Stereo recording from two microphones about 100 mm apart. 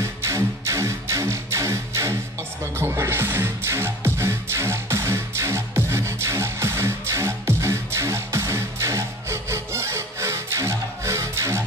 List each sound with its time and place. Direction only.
0.0 s music: 30° right (ahead or behind)